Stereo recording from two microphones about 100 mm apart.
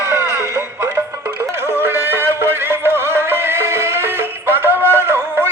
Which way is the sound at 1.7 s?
20° right (ahead or behind).